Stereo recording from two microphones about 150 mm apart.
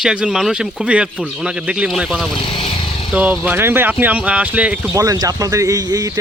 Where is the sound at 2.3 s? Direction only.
35° left (ahead or behind).